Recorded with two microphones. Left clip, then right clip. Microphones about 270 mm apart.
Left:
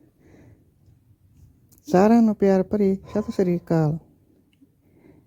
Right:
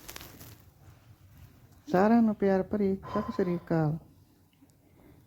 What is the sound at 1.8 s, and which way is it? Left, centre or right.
Speech, centre.